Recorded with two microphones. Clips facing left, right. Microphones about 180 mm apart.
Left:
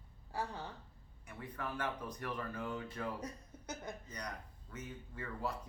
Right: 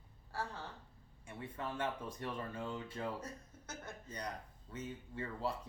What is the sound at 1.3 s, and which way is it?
Speech, 25° right (ahead or behind).